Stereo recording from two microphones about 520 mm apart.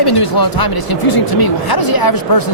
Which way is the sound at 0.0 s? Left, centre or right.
Left.